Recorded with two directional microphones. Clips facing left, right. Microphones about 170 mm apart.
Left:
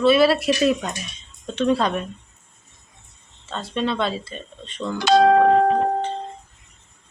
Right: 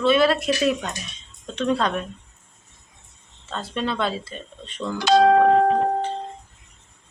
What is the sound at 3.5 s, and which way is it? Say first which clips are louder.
Speech: left 2 dB; centre (ahead or behind).